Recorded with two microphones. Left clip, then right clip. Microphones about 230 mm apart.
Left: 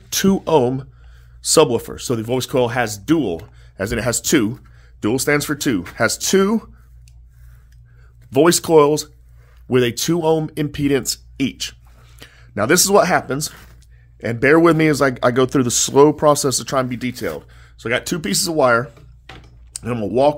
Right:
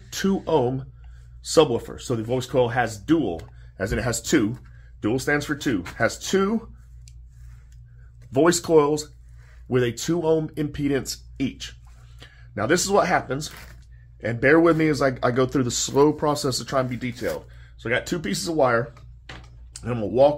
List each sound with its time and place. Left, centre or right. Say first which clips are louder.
0.1 s speech: left 7 dB; left
3.7 s speech: left 5 dB; left
5.0 s speech: left 5 dB; left
8.3 s speech: left 5 dB; left